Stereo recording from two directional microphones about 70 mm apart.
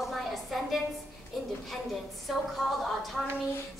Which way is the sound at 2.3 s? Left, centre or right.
Centre.